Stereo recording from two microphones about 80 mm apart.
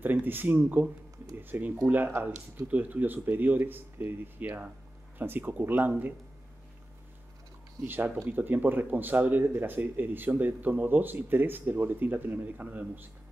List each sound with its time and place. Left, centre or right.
0.0 s speech: right
1.3 s a sound: right
1.9 s speech: right
7.8 s speech: right